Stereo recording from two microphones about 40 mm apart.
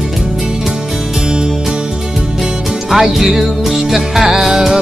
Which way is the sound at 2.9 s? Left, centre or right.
Centre.